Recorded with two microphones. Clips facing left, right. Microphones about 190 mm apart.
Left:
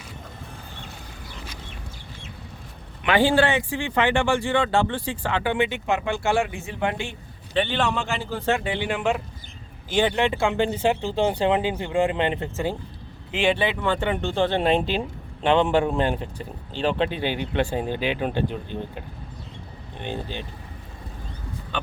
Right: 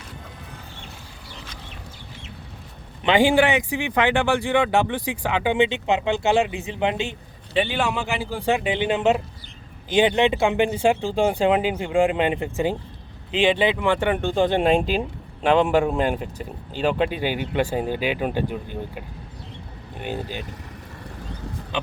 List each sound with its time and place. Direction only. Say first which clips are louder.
3.1 s speech: right 2 dB; 15° right (ahead or behind)